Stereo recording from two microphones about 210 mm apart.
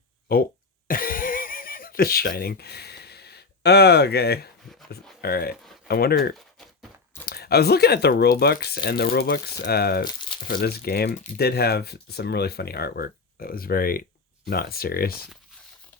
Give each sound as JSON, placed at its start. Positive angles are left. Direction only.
{"t": 0.3, "sound": "speech", "side_deg": 45}
{"t": 0.9, "sound": "a sound", "side_deg": 40}
{"t": 5.2, "sound": "speech", "side_deg": 45}